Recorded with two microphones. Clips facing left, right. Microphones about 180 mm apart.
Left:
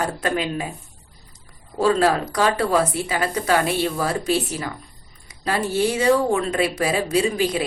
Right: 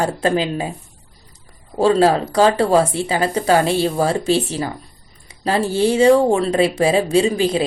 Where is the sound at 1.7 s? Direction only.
30° right (ahead or behind).